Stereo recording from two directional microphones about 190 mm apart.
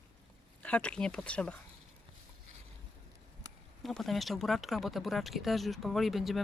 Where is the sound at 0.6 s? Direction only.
5° left (ahead or behind).